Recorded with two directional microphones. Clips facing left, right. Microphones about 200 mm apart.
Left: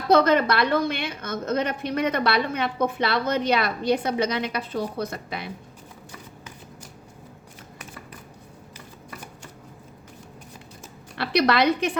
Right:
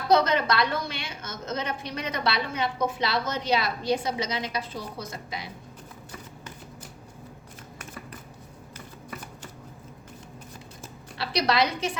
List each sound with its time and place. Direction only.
0.1 s a woman's voice: 55° left (ahead or behind)
11.2 s a woman's voice: 60° left (ahead or behind)